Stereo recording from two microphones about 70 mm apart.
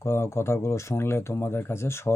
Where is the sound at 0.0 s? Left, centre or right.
Left.